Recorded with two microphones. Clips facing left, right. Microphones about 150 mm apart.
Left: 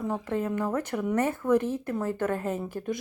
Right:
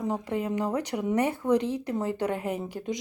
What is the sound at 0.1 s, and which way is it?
Speech, 15° right (ahead or behind).